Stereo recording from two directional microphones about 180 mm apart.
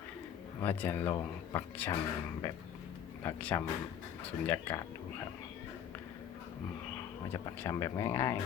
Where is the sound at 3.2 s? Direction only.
10° left (ahead or behind).